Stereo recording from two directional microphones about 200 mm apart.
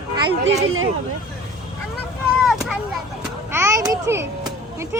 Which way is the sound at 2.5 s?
Centre (ahead or behind).